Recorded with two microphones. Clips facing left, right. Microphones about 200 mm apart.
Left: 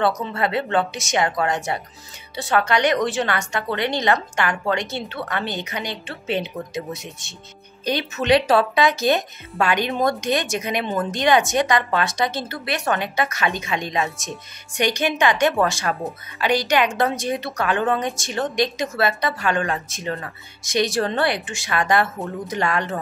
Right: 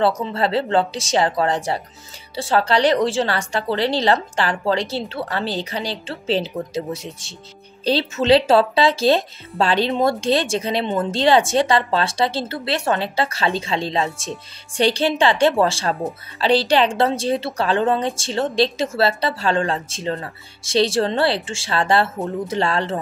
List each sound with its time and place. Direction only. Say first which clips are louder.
0.0 s a woman's voice: right 2 dB; 30° right (ahead or behind)